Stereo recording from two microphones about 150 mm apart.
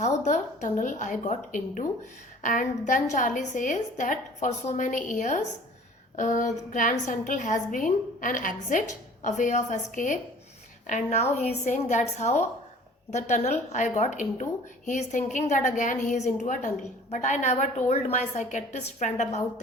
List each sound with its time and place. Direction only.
0.3 s a woman's voice: 55° left (ahead or behind)